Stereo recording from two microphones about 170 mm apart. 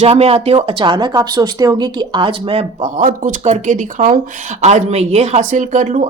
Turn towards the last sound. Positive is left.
turn(degrees=-45)  # may be behind; listen again after turning